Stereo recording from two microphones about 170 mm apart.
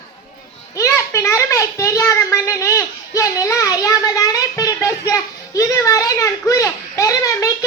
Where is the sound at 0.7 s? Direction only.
15° left (ahead or behind).